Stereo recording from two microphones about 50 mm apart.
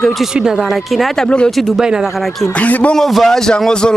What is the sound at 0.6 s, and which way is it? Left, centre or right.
Speech, centre.